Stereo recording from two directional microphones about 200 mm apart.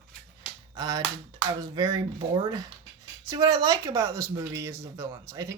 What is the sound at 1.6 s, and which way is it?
Speech, 20° right (ahead or behind).